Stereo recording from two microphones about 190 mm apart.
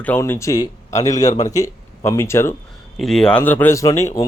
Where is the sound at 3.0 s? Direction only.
5° left (ahead or behind).